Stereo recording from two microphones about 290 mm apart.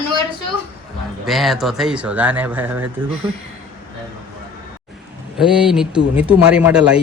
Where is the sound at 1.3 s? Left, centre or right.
Centre.